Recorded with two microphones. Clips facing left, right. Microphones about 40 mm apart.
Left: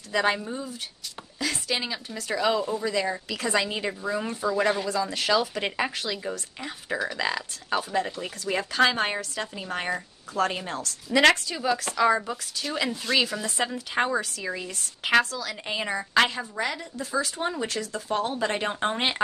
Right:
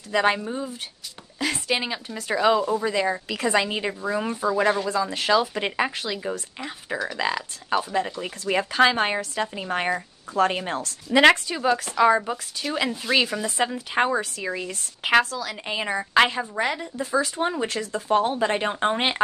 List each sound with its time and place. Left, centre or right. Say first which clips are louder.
0.1 s a woman's voice: right 3 dB; centre